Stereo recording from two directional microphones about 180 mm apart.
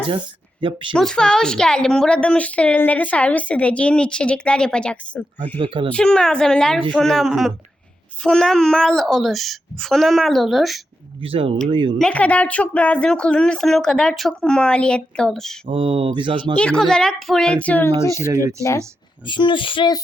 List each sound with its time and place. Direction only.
0.6 s speech: 25° right (ahead or behind)
0.9 s speech: 5° left (ahead or behind)
5.5 s speech: 30° right (ahead or behind)
5.9 s speech: 5° left (ahead or behind)
11.2 s speech: 30° right (ahead or behind)
11.9 s speech: 5° left (ahead or behind)
15.6 s speech: 30° right (ahead or behind)
16.6 s speech: 5° left (ahead or behind)
19.2 s speech: 25° left (ahead or behind)